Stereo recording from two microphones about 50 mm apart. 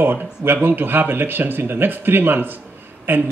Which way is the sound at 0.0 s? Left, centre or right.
Right.